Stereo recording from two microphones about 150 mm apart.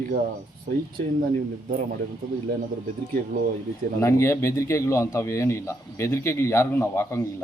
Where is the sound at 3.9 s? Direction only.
20° left (ahead or behind).